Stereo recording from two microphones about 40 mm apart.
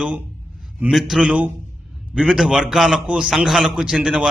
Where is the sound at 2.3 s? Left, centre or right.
Centre.